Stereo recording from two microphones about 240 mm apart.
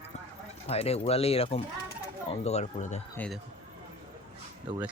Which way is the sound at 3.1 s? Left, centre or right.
Centre.